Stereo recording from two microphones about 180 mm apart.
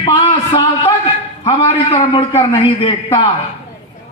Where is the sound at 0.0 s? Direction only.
30° left (ahead or behind).